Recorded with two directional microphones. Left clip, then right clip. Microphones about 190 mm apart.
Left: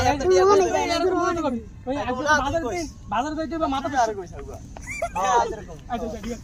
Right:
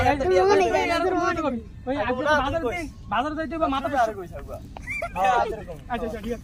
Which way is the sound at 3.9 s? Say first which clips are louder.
Left 1 dB; 25° right (ahead or behind).